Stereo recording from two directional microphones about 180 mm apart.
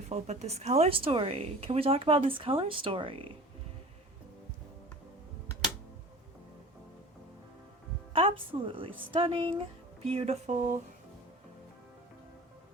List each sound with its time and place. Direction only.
0.1 s a woman's voice: 40° right (ahead or behind)
8.1 s a woman's voice: 30° right (ahead or behind)